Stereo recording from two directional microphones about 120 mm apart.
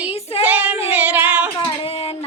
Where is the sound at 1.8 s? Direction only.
55° left (ahead or behind).